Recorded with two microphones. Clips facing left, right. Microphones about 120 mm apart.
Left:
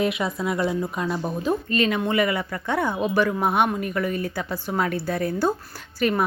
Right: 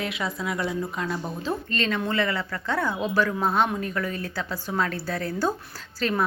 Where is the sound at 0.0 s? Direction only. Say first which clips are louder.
Left 6 dB; 20° left (ahead or behind).